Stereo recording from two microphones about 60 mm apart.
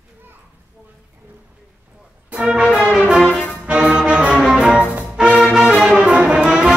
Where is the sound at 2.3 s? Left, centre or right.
Centre.